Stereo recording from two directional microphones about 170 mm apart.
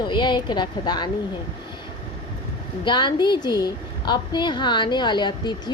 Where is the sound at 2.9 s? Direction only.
25° left (ahead or behind).